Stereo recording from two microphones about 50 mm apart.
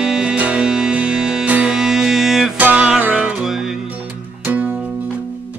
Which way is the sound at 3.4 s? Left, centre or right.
Centre.